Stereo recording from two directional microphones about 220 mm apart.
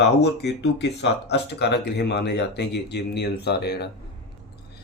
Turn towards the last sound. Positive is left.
turn(degrees=50)  # may be behind; listen again after turning